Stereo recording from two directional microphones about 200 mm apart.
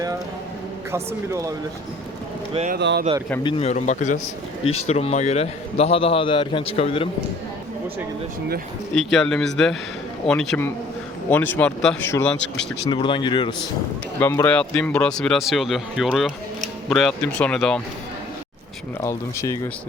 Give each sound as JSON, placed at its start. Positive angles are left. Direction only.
{"t": 0.9, "sound": "a man's voice", "side_deg": -15}
{"t": 2.5, "sound": "speech", "side_deg": -30}
{"t": 2.7, "sound": "speech", "side_deg": -55}
{"t": 3.4, "sound": "speech", "side_deg": 30}
{"t": 4.6, "sound": "speech", "side_deg": 90}
{"t": 4.9, "sound": "a man's voice", "side_deg": 30}
{"t": 9.0, "sound": "speech", "side_deg": 0}
{"t": 12.8, "sound": "a man's voice", "side_deg": 25}
{"t": 14.2, "sound": "speech", "side_deg": 10}
{"t": 19.0, "sound": "speech", "side_deg": 15}